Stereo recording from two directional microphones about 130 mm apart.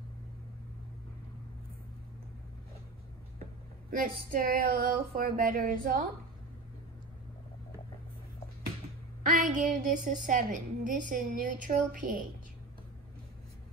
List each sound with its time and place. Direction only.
3.9 s a woman's voice: 90° right
9.3 s a woman's voice: 90° right